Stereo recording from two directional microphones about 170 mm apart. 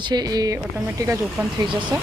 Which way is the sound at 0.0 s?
25° right (ahead or behind).